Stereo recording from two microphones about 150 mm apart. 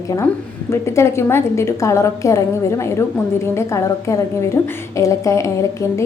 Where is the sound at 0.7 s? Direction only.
20° left (ahead or behind).